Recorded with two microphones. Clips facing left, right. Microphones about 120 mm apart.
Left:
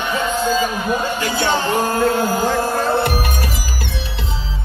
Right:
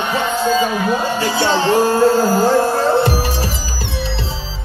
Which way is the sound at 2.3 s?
35° right (ahead or behind).